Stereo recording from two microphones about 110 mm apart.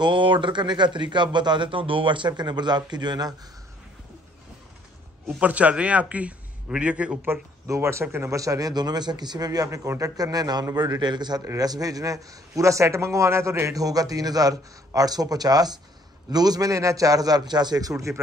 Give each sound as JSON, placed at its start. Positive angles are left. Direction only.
{"t": 0.0, "sound": "a man's voice", "side_deg": -50}
{"t": 5.4, "sound": "a man's voice", "side_deg": -10}
{"t": 7.6, "sound": "a man's voice", "side_deg": -25}